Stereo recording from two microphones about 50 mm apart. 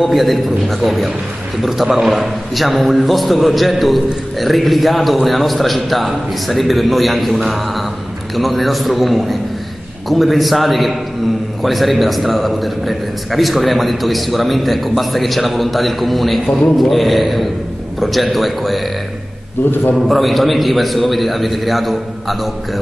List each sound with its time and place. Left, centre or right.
0.0 s a man's voice: centre
19.7 s a man's voice: left
20.1 s a man's voice: centre